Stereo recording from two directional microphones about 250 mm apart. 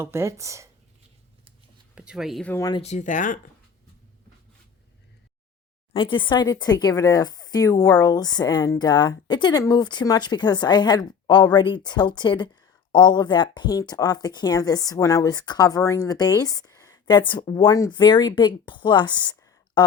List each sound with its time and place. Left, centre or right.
0.0 s speech: centre
2.0 s speech: centre
2.8 s speech: left
5.9 s speech: centre